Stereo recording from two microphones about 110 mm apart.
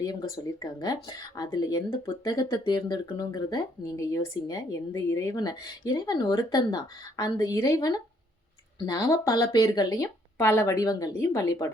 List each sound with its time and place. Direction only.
0.0 s a woman's voice: 35° left (ahead or behind)